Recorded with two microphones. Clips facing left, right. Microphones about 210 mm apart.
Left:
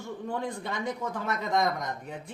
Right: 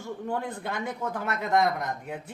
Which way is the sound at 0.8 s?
5° right (ahead or behind).